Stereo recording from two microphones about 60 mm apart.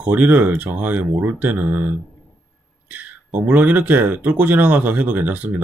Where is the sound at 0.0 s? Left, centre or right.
Right.